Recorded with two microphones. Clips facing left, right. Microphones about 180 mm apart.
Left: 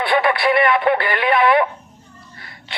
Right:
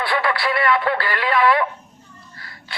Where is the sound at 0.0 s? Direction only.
20° left (ahead or behind).